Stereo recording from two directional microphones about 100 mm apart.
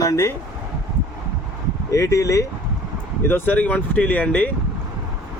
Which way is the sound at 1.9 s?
30° left (ahead or behind).